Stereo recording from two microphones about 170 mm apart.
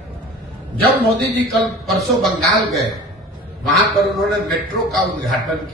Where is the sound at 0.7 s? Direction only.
70° right (ahead or behind).